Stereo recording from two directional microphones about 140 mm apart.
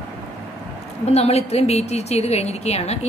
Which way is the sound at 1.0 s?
50° left (ahead or behind).